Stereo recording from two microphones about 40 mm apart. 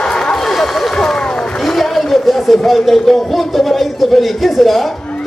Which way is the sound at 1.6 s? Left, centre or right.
Centre.